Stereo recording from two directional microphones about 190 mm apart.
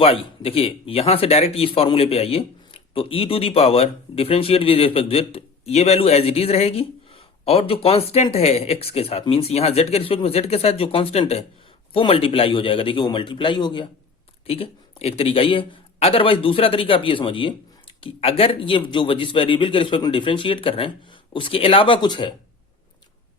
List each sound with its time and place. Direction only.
0.0 s a man's voice: 30° left (ahead or behind)